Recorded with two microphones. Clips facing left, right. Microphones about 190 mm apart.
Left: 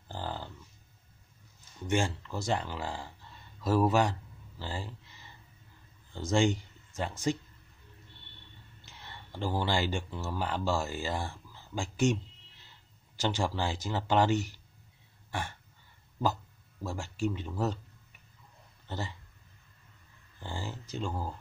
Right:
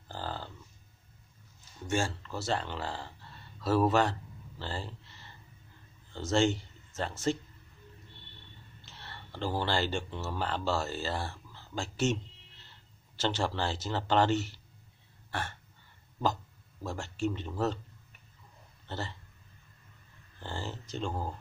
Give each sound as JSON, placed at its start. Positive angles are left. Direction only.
{"t": 0.1, "sound": "a sound", "side_deg": 15}
{"t": 1.9, "sound": "speech", "side_deg": 20}
{"t": 8.8, "sound": "speech", "side_deg": 15}
{"t": 16.8, "sound": "speech", "side_deg": 10}
{"t": 18.9, "sound": "speech", "side_deg": 10}
{"t": 20.4, "sound": "speech", "side_deg": 10}